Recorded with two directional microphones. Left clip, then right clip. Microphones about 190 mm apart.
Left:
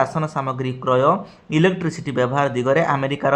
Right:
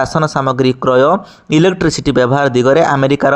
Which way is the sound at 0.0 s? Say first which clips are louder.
Right 7 dB; 35° right (ahead or behind).